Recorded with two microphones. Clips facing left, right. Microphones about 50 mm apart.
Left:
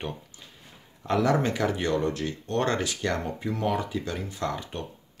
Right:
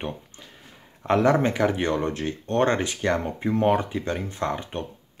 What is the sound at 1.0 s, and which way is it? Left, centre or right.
Speech, right.